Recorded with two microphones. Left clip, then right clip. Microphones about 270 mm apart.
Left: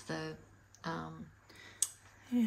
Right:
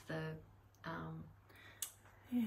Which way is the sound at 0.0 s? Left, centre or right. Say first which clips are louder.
Left 4 dB; centre.